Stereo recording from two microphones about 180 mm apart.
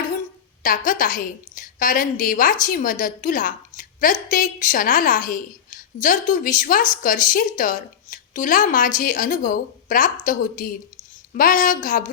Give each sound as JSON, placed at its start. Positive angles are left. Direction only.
{"t": 0.9, "sound": "a woman's voice", "side_deg": 50}